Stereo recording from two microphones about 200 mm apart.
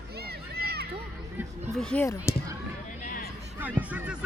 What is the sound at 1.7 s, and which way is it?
Speech, 5° left (ahead or behind).